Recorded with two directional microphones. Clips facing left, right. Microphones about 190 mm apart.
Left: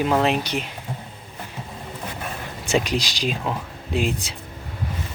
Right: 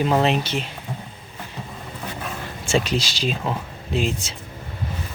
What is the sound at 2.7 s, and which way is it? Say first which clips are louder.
Speech: even; 15° left (ahead or behind).